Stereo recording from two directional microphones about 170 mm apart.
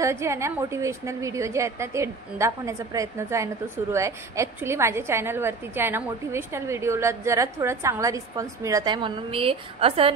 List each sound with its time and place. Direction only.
0.0 s a woman's voice: 15° right (ahead or behind); by 10.1 s 35° right (ahead or behind)